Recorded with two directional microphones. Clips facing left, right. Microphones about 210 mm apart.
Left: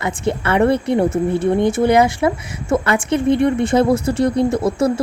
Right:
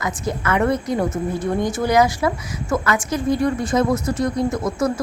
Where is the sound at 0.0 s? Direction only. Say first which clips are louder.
Left 4 dB; 30° left (ahead or behind).